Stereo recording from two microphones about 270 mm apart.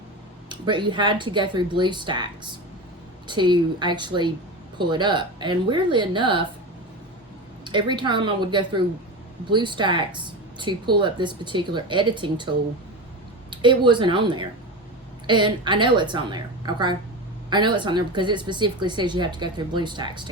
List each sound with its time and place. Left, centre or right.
0.4 s a woman's voice: centre
7.6 s a woman's voice: centre
13.5 s a woman's voice: centre